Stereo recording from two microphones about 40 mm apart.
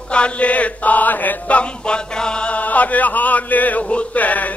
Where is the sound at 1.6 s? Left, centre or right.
Left.